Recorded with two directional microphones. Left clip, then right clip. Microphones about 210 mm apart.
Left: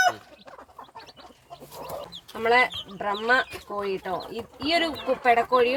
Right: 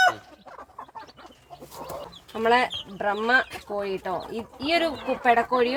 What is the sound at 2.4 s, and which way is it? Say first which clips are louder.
Speech: even; 30° right (ahead or behind).